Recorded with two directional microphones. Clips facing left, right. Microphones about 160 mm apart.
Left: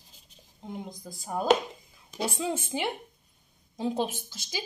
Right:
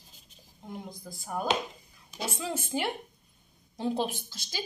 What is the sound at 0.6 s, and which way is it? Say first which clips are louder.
A woman's voice: left 2 dB; 20° left (ahead or behind).